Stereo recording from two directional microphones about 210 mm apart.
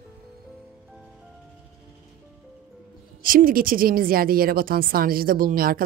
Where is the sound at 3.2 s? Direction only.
40° right (ahead or behind).